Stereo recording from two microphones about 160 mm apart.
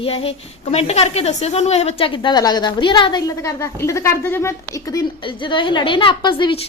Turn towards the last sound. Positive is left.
turn(degrees=30)  # may be behind; listen again after turning